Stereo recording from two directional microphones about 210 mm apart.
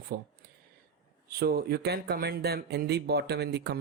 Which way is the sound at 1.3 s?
45° right (ahead or behind).